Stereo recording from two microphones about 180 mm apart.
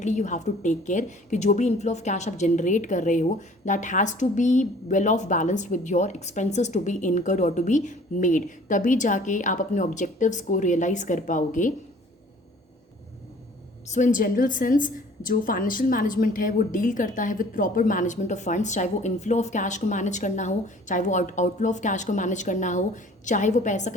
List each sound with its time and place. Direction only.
0.0 s a woman's voice: 40° left (ahead or behind)
13.9 s a woman's voice: 45° left (ahead or behind)